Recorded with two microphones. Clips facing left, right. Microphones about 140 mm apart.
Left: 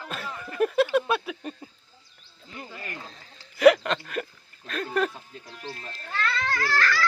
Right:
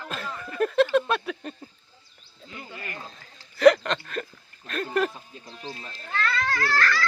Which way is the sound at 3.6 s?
5° left (ahead or behind).